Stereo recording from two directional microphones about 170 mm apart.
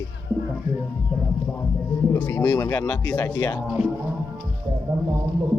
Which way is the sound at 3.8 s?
40° left (ahead or behind).